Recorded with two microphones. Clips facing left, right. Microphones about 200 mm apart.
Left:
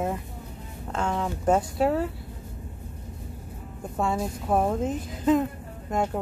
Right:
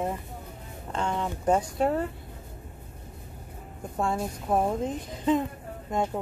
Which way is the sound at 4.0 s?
5° left (ahead or behind).